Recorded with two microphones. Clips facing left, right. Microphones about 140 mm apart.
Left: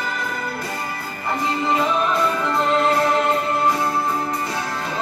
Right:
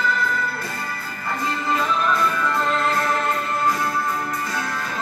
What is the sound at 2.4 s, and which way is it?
Music, 20° left (ahead or behind).